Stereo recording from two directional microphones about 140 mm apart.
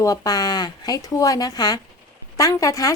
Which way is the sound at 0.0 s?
25° left (ahead or behind).